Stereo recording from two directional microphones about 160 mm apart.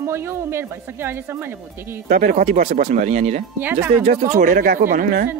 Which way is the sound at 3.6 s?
10° right (ahead or behind).